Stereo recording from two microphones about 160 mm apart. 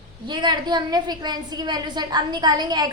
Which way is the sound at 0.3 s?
30° right (ahead or behind).